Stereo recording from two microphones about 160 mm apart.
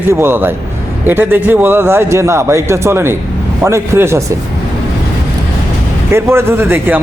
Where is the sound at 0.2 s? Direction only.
15° right (ahead or behind).